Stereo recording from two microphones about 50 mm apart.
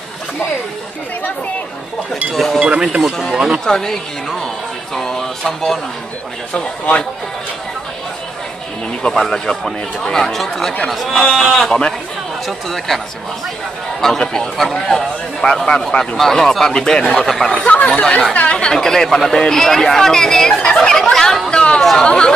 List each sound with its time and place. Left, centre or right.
2.3 s speech: centre
3.3 s speech: centre
3.6 s speech: centre
6.5 s speech: left
9.0 s speech: centre
11.1 s speech: centre
14.0 s speech: centre
17.5 s speech: left
18.8 s speech: centre